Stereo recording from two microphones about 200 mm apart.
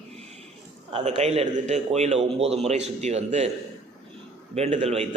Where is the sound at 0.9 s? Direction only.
30° right (ahead or behind).